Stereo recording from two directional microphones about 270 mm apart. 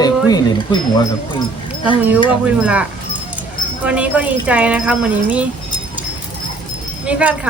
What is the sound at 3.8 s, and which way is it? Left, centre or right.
Speech, centre.